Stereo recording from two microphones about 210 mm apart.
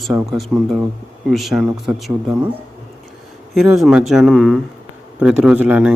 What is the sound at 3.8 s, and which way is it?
Speech, centre (ahead or behind).